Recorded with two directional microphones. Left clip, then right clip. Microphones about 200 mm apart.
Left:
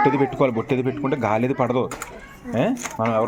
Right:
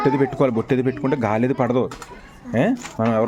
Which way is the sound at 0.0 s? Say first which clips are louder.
Even; 25° right (ahead or behind).